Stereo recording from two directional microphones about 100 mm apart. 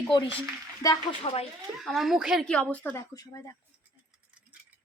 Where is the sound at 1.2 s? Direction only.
80° left.